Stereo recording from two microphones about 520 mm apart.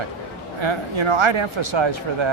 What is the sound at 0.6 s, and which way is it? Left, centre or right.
Speech, right.